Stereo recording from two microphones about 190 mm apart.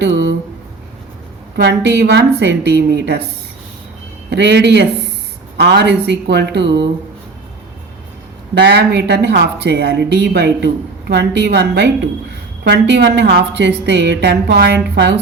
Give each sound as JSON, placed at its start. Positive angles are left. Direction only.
{"t": 0.0, "sound": "speech", "side_deg": -65}
{"t": 1.5, "sound": "speech", "side_deg": -60}
{"t": 4.3, "sound": "speech", "side_deg": -65}
{"t": 8.5, "sound": "a woman's voice", "side_deg": -65}